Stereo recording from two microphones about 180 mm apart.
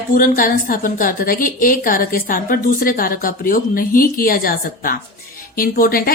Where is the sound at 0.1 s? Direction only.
50° left (ahead or behind).